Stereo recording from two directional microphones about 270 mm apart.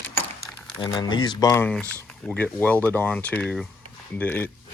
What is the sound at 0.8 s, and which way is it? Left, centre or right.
Speech, centre.